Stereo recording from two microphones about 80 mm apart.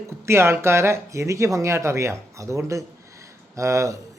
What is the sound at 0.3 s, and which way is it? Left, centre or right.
Speech, right.